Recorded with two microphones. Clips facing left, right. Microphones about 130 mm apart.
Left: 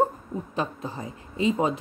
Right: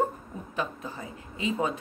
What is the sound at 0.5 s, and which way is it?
Speech, 35° left (ahead or behind).